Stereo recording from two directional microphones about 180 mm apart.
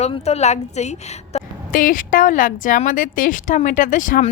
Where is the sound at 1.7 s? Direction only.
50° left (ahead or behind).